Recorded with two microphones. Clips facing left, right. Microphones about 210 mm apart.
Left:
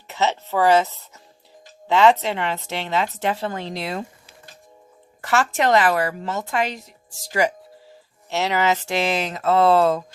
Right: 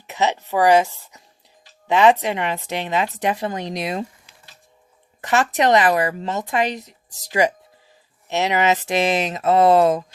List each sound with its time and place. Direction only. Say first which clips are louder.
0.1 s a woman's voice: right 1 dB; 15° right (ahead or behind)
5.2 s a woman's voice: right 2 dB; 20° right (ahead or behind)